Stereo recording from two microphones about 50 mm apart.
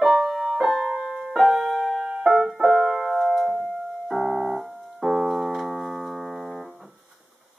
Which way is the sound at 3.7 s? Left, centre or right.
Centre.